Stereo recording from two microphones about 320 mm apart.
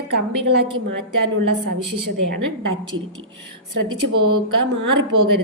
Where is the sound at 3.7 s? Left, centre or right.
Right.